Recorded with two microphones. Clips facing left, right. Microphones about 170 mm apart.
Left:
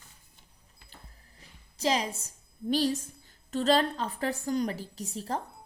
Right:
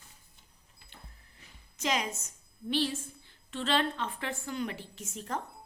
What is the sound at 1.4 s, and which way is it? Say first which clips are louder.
A woman's voice: left 2 dB; 35° left (ahead or behind).